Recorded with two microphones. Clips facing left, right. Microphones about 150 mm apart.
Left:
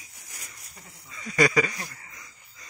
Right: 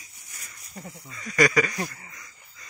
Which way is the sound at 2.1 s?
10° left (ahead or behind).